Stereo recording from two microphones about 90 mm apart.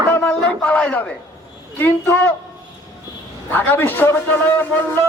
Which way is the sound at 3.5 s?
20° left (ahead or behind).